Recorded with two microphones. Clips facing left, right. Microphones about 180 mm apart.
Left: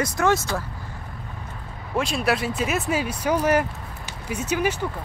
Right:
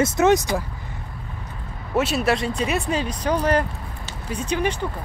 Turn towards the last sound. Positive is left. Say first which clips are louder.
# even
turn(degrees=5)  # may be behind; listen again after turning